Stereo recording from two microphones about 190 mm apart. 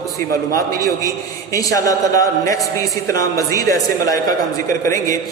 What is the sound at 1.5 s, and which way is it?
A man's voice, 15° left (ahead or behind).